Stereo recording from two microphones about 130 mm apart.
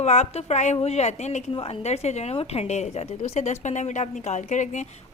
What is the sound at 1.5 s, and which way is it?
A woman's voice, 50° left (ahead or behind).